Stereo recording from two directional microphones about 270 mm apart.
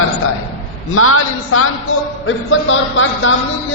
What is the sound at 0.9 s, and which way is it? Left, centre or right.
A man's voice, left.